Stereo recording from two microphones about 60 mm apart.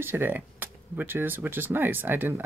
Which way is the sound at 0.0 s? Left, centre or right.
Right.